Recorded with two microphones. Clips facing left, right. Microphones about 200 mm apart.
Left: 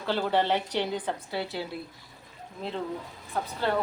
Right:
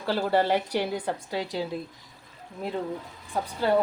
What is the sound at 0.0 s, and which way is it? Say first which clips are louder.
Speech: right 2 dB; 10° right (ahead or behind).